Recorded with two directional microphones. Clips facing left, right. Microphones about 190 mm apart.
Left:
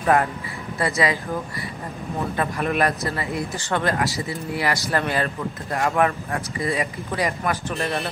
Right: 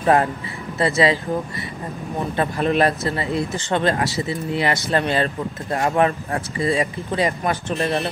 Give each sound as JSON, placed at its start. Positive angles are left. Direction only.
{"t": 0.0, "sound": "speech", "side_deg": -30}
{"t": 2.3, "sound": "speech", "side_deg": -30}